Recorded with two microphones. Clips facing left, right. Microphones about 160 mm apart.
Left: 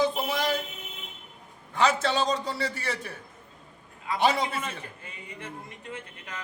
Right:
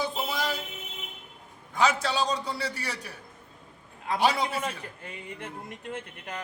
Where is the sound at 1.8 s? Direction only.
10° right (ahead or behind).